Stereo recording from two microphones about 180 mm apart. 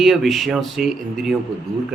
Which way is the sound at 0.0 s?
Centre (ahead or behind).